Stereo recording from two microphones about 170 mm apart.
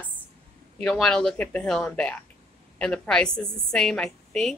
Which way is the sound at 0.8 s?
5° left (ahead or behind).